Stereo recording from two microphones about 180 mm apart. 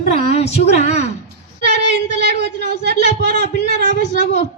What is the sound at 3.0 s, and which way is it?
Speech, 40° left (ahead or behind).